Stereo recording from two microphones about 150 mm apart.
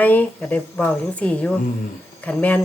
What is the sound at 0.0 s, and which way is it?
Speech, 10° left (ahead or behind).